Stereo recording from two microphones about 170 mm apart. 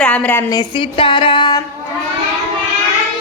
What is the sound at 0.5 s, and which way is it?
A woman's voice, 30° left (ahead or behind).